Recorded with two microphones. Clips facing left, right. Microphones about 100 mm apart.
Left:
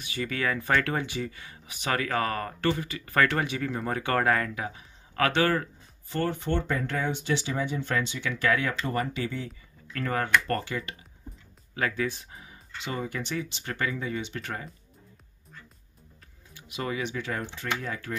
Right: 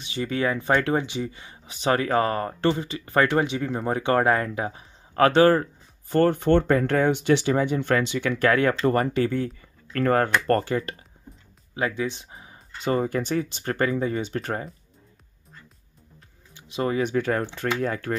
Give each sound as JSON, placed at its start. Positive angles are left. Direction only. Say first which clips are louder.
{"t": 0.0, "sound": "speech", "louder": "right 5 dB", "side_deg": -25}
{"t": 6.0, "sound": "speech", "louder": "right 9 dB", "side_deg": -50}
{"t": 11.7, "sound": "a sound", "louder": "right 3 dB", "side_deg": -20}
{"t": 12.8, "sound": "speech", "louder": "right 9 dB", "side_deg": -45}
{"t": 16.5, "sound": "speech", "louder": "right 7 dB", "side_deg": -30}